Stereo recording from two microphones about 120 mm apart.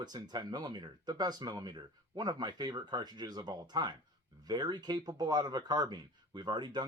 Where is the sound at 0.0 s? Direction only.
35° right (ahead or behind).